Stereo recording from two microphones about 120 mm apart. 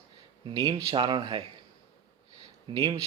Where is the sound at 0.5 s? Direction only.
30° right (ahead or behind).